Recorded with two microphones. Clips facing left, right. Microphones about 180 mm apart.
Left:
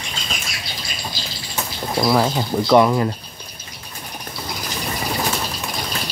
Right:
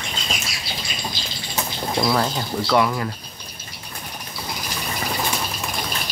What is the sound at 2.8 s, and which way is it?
Speech, 25° left (ahead or behind).